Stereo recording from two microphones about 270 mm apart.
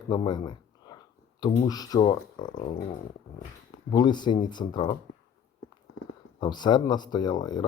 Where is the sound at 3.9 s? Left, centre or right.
Centre.